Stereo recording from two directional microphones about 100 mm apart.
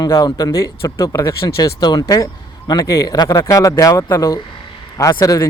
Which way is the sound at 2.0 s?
30° left (ahead or behind).